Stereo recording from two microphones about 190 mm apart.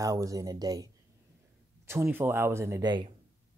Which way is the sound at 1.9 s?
10° right (ahead or behind).